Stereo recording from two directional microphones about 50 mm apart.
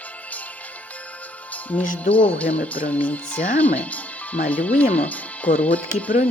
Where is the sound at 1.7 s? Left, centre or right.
Left.